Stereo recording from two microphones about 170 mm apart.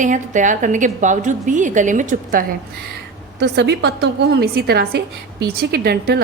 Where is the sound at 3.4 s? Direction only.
85° right; by 6.2 s 65° right (ahead or behind).